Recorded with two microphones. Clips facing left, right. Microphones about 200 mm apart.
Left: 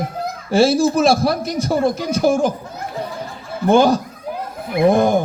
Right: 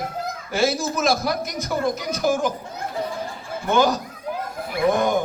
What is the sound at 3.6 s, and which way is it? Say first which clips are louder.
A man's voice: left 6 dB; 30° left (ahead or behind).